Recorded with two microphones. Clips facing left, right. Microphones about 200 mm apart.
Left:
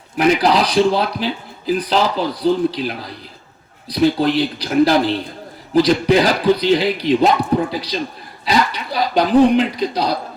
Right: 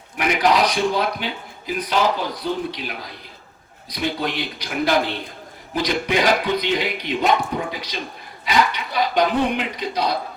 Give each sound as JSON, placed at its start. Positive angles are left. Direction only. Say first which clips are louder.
{"t": 0.2, "sound": "speech", "louder": "left 4 dB", "side_deg": 35}